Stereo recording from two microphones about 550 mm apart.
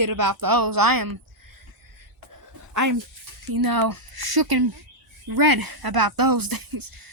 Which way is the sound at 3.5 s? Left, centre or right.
Right.